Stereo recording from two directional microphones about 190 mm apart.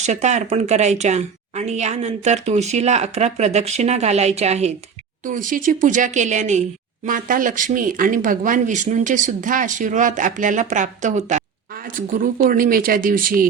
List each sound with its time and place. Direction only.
0.0 s speech: 40° right (ahead or behind)